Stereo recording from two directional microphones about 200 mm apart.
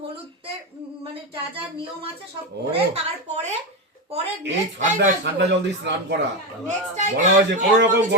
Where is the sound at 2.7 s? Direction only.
30° right (ahead or behind).